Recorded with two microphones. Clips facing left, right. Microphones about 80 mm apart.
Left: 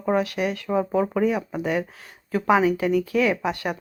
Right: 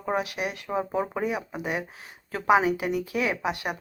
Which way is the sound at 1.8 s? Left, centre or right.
Right.